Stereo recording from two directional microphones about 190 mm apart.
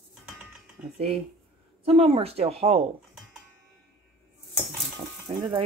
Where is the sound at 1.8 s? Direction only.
30° right (ahead or behind).